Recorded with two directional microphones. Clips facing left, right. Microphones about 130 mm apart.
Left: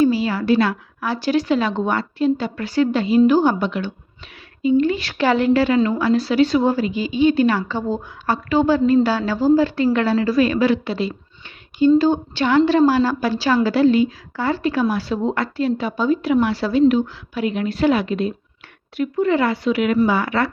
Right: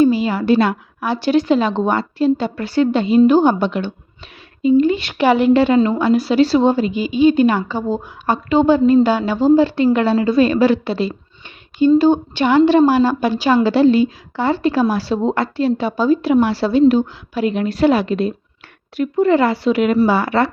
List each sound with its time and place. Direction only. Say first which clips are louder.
0.0 s a woman's voice: right 3 dB; 20° right (ahead or behind)
11.9 s a woman's voice: right 3 dB; 20° right (ahead or behind)